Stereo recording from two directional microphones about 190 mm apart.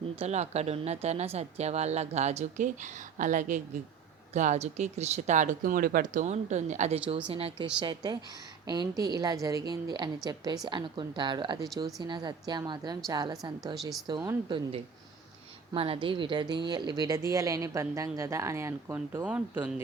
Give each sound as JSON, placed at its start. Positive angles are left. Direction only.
{"t": 0.2, "sound": "a woman's voice", "side_deg": -35}
{"t": 15.7, "sound": "speech", "side_deg": -30}